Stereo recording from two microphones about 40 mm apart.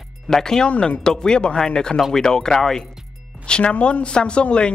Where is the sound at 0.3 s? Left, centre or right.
Centre.